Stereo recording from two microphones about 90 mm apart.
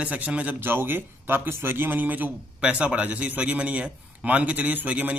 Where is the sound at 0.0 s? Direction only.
15° right (ahead or behind).